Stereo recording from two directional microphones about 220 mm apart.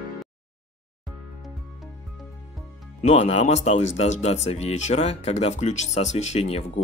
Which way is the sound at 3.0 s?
30° left (ahead or behind).